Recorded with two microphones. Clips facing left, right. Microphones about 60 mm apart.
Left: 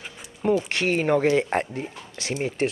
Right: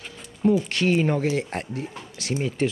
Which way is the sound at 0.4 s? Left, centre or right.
Left.